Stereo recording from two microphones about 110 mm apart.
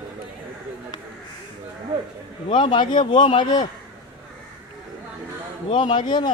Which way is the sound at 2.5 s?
45° left (ahead or behind).